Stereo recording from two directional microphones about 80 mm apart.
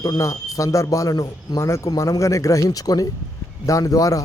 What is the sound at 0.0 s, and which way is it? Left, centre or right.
A man's voice, left.